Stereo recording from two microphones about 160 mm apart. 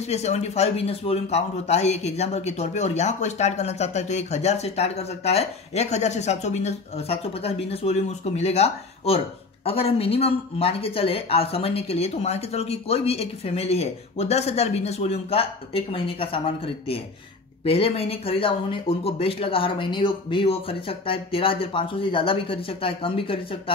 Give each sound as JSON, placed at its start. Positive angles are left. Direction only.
{"t": 0.1, "sound": "speech", "side_deg": 40}